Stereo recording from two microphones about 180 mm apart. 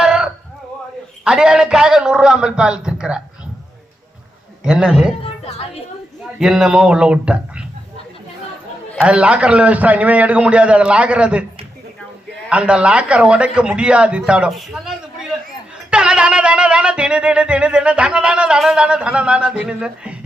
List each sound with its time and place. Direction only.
0.0 s a sound: 5° right (ahead or behind)
1.2 s music: 5° right (ahead or behind)
4.6 s music: 5° right (ahead or behind)
5.2 s speech: 35° left (ahead or behind)
6.4 s music: centre (ahead or behind)
9.0 s a man's voice: 5° right (ahead or behind)
12.5 s music: 5° right (ahead or behind)